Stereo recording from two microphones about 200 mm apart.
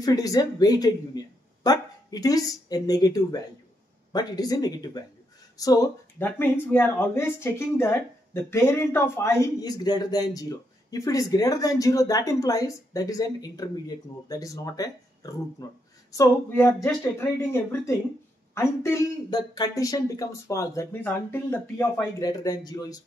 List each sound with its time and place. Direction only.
0.0 s speech: 20° left (ahead or behind)